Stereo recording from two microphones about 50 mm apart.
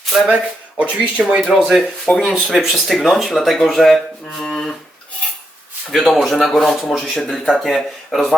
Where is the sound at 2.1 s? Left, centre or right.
Centre.